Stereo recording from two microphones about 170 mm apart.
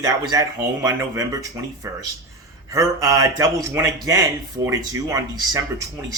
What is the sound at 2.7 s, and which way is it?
A man's voice, 20° right (ahead or behind).